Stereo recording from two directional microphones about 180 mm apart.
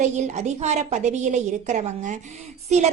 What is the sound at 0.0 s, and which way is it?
A woman's voice, 40° right (ahead or behind).